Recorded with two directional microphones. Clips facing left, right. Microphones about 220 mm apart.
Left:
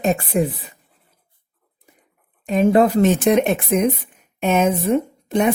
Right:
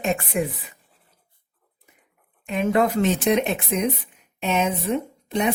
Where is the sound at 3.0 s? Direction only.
50° left (ahead or behind).